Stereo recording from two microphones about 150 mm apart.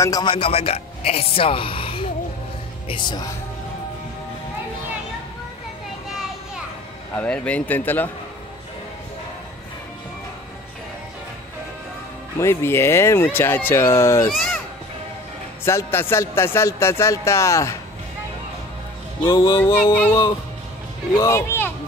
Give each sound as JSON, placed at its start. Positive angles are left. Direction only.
{"t": 0.0, "sound": "music", "side_deg": 25}
{"t": 0.3, "sound": "speech", "side_deg": 40}
{"t": 2.9, "sound": "music", "side_deg": 30}
{"t": 7.2, "sound": "speech", "side_deg": 10}
{"t": 12.4, "sound": "speech", "side_deg": 15}
{"t": 15.6, "sound": "speech", "side_deg": 15}
{"t": 19.2, "sound": "music", "side_deg": 30}
{"t": 19.6, "sound": "speech", "side_deg": 15}
{"t": 21.2, "sound": "speech", "side_deg": 15}